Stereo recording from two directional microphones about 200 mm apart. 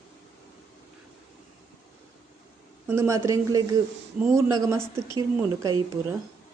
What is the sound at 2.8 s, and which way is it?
Speech, 15° right (ahead or behind).